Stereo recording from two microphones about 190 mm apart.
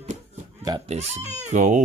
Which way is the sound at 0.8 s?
35° right (ahead or behind).